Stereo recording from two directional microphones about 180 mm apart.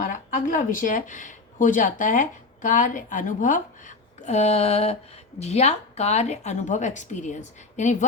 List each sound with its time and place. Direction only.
0.0 s speech: 45° left (ahead or behind)